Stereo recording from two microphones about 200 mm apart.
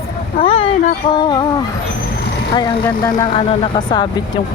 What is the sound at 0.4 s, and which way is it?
Speech, 30° left (ahead or behind).